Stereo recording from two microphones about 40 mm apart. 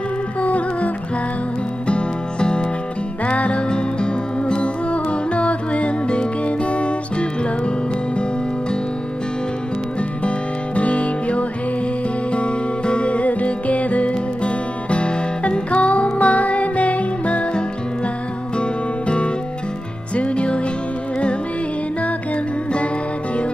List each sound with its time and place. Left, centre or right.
0.4 s music: left
1.9 s music: left
10.2 s music: left
18.6 s music: left